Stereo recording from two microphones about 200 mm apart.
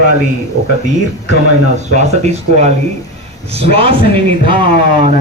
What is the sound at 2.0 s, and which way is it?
A man's voice, 35° right (ahead or behind).